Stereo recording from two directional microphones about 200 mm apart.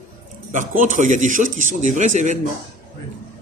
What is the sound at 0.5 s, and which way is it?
A man's voice, 40° right (ahead or behind).